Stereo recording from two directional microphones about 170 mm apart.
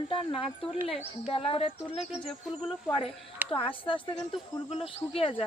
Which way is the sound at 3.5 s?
30° left (ahead or behind).